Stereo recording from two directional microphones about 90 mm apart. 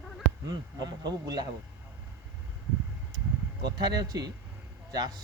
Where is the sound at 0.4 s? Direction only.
45° right (ahead or behind).